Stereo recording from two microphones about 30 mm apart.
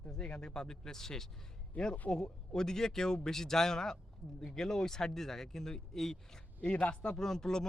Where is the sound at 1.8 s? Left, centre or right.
Left.